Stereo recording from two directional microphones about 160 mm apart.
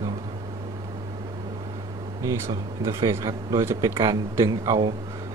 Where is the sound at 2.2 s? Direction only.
20° right (ahead or behind).